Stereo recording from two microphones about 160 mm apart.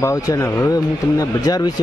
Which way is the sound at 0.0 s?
20° left (ahead or behind).